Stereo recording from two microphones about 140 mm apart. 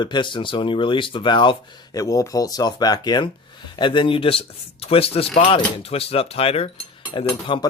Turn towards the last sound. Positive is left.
turn(degrees=35)  # may be behind; listen again after turning